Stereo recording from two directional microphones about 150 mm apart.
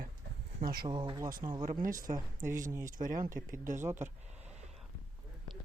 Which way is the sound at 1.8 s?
65° right (ahead or behind).